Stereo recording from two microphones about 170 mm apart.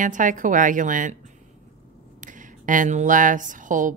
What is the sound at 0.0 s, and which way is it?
Speech, 50° right (ahead or behind).